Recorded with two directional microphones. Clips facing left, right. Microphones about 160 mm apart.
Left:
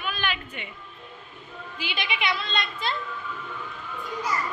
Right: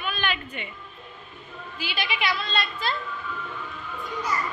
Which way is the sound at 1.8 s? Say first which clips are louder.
Right 1 dB; 20° left (ahead or behind).